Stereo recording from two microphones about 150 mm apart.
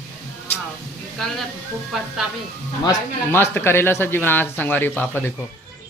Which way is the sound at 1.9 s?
Centre (ahead or behind).